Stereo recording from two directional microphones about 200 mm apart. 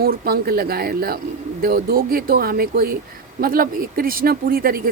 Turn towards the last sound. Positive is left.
turn(degrees=-45)  # may be behind; listen again after turning